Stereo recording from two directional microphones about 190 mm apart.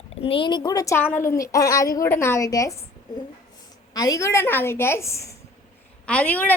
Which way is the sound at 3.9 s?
20° left (ahead or behind).